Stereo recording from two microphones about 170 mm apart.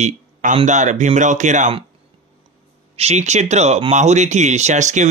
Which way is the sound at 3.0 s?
40° right (ahead or behind).